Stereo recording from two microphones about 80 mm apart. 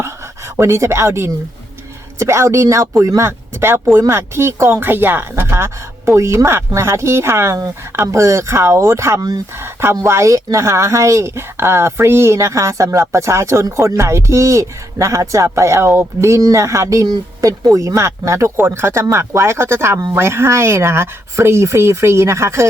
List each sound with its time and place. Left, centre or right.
0.5 s speech: right